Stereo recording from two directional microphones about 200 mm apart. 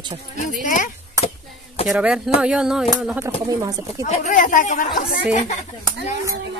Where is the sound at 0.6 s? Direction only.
40° left (ahead or behind).